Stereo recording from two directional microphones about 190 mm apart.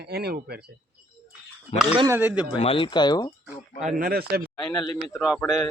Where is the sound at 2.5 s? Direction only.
30° left (ahead or behind).